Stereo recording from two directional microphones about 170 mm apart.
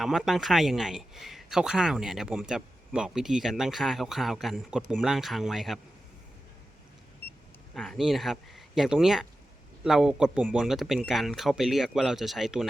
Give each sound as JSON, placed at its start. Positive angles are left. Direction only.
{"t": 0.0, "sound": "a man's voice", "side_deg": 0}
{"t": 7.7, "sound": "a man's voice", "side_deg": 0}